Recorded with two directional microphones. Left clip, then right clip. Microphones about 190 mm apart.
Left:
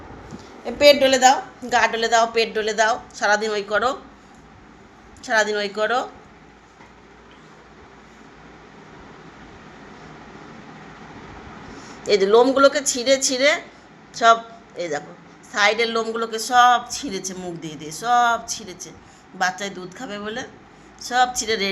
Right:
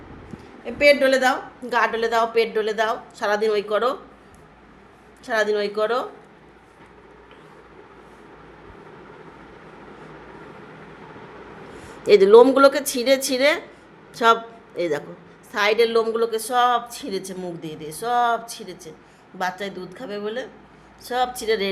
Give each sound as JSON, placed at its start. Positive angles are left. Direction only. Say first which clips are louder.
{"t": 0.6, "sound": "a woman's voice", "louder": "left 2 dB", "side_deg": -5}
{"t": 5.2, "sound": "a woman's voice", "louder": "left 1 dB", "side_deg": -15}
{"t": 12.0, "sound": "a woman's voice", "louder": "right 4 dB", "side_deg": -35}
{"t": 15.5, "sound": "a woman's voice", "louder": "right 1 dB", "side_deg": -25}